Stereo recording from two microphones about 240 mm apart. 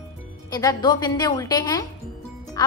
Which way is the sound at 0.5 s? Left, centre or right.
Centre.